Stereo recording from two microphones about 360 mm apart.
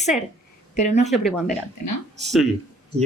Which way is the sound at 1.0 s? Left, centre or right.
Centre.